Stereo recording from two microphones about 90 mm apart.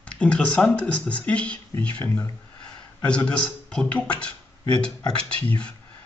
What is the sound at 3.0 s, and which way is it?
Speech, 10° left (ahead or behind).